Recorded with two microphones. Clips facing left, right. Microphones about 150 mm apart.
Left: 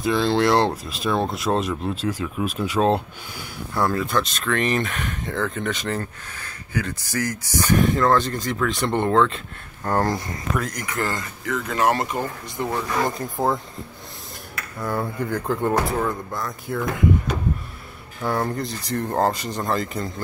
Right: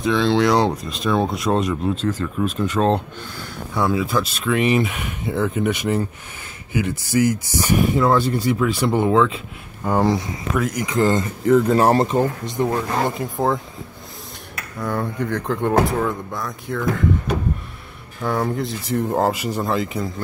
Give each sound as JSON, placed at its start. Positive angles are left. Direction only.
{"t": 0.0, "sound": "speech", "side_deg": 0}
{"t": 11.4, "sound": "speech", "side_deg": -30}
{"t": 12.2, "sound": "speech", "side_deg": -20}
{"t": 12.6, "sound": "speech", "side_deg": -5}
{"t": 14.8, "sound": "speech", "side_deg": 5}
{"t": 18.2, "sound": "speech", "side_deg": 0}